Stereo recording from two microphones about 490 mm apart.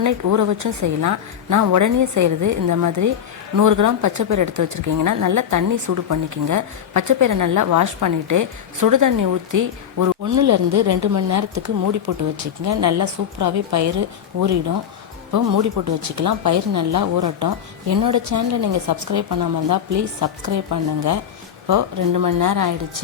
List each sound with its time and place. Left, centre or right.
0.0 s a woman's voice: right
15.3 s a woman's voice: right